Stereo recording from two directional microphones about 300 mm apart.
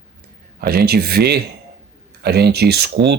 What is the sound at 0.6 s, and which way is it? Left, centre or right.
Speech, right.